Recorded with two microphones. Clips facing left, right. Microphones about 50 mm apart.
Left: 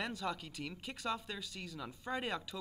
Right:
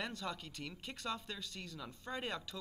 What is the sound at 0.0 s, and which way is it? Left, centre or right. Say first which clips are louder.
Speech: left 3 dB; centre.